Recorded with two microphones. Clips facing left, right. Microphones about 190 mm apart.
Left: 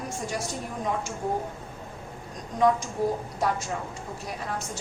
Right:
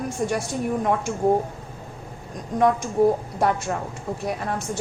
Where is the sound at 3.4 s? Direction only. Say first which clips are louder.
Right 4 dB; 60° right (ahead or behind).